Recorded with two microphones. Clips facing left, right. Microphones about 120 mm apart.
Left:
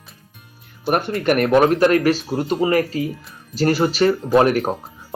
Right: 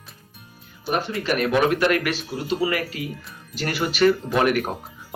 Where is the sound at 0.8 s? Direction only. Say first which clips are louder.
Left 6 dB; 55° left (ahead or behind).